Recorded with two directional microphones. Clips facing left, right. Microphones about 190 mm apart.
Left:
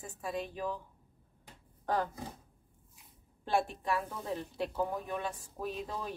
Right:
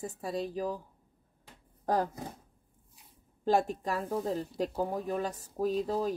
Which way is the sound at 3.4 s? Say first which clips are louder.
Right 4 dB; 40° right (ahead or behind).